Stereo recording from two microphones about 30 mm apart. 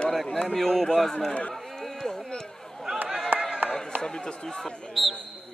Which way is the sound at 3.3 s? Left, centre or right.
Right.